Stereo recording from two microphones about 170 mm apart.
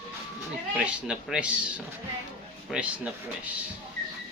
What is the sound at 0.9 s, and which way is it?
Speech, 5° right (ahead or behind).